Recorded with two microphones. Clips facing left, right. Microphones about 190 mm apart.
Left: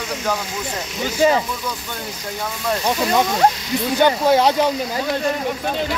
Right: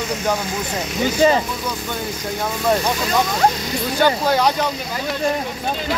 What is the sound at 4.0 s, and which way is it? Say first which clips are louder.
Speech: left 2 dB; 20° left (ahead or behind).